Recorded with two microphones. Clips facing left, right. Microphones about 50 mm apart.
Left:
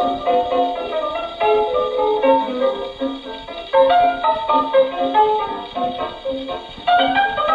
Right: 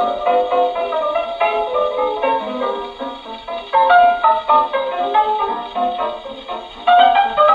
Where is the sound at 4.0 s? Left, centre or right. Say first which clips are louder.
Right 4 dB; right.